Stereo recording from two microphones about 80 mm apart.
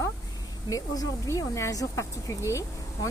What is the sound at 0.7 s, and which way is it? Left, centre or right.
Speech, left.